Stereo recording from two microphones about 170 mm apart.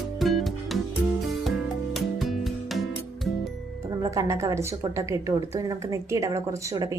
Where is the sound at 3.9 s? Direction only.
20° right (ahead or behind).